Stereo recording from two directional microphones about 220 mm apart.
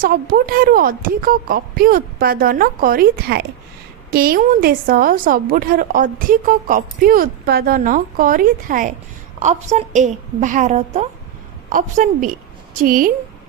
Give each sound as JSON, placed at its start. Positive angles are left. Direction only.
{"t": 0.0, "sound": "a woman's voice", "side_deg": -40}